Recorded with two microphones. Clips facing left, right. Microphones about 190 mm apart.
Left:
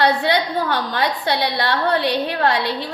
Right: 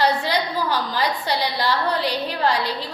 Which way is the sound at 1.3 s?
65° left (ahead or behind).